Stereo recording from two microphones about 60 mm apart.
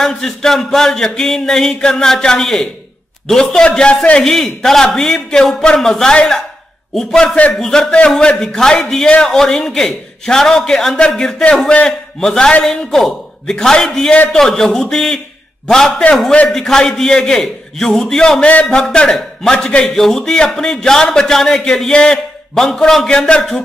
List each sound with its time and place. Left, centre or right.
0.0 s a man's voice: centre
4.2 s a man's voice: centre
18.5 s a man's voice: left
18.8 s a man's voice: centre